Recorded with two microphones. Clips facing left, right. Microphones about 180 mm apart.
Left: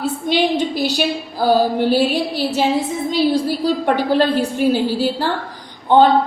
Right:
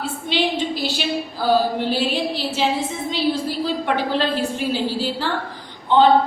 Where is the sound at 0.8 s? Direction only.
45° left (ahead or behind).